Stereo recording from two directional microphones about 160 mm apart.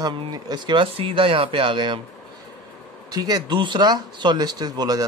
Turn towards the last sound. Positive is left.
turn(degrees=-25)  # may be behind; listen again after turning